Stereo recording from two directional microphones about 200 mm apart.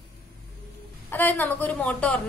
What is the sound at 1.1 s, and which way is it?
A woman's voice, 10° left (ahead or behind).